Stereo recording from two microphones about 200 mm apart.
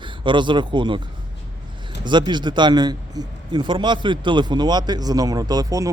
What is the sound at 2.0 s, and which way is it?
Speech, 20° right (ahead or behind).